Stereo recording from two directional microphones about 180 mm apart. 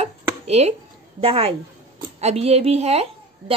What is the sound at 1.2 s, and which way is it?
A woman's voice, 30° right (ahead or behind).